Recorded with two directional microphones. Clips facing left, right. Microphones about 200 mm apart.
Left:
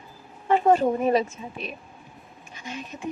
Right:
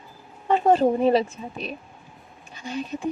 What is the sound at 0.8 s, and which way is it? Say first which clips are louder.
Speech: right 3 dB; 30° right (ahead or behind).